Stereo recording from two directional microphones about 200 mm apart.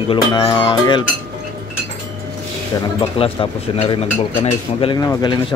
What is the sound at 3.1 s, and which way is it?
Speech, 25° left (ahead or behind).